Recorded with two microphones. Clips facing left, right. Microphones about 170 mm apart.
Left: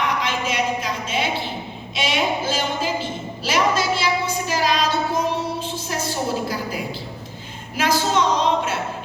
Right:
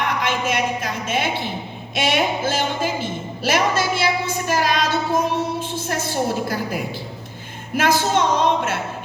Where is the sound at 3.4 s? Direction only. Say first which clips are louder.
Right 1 dB; 50° right (ahead or behind).